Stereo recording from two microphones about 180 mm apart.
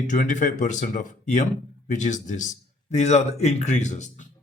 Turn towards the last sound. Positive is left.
turn(degrees=40)  # may be behind; listen again after turning